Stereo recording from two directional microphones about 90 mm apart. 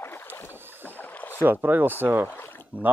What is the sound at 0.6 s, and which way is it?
Rowboat, 25° right (ahead or behind).